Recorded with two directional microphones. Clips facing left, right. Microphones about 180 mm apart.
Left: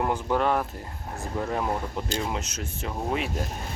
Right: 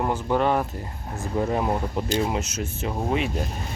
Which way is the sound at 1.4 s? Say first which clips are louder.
Right 4 dB; 15° right (ahead or behind).